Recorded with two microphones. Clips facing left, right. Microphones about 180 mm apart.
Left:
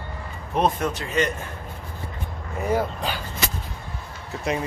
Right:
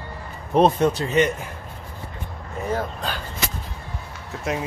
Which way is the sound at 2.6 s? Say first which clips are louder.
Left 2 dB; 10° left (ahead or behind).